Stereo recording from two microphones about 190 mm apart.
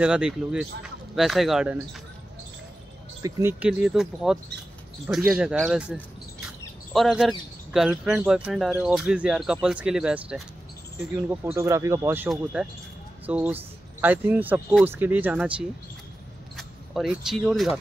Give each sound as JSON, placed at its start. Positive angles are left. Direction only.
{"t": 0.0, "sound": "speech", "side_deg": -5}
{"t": 3.2, "sound": "speech", "side_deg": -15}